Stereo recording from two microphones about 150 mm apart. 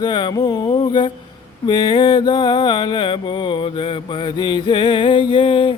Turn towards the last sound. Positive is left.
turn(degrees=35)  # may be behind; listen again after turning